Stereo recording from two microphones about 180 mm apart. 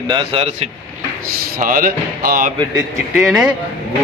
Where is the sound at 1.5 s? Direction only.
50° right (ahead or behind).